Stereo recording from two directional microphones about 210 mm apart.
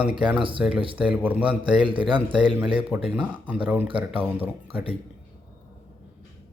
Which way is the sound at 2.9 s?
5° right (ahead or behind).